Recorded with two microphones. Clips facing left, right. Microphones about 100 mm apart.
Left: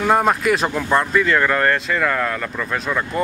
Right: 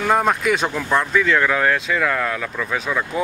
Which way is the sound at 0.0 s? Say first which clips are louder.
Left 1 dB; 5° left (ahead or behind).